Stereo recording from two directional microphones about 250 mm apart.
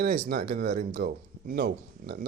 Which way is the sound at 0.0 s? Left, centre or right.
Right.